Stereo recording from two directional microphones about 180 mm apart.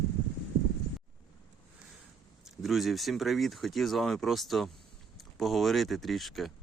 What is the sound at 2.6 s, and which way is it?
Speech, centre (ahead or behind).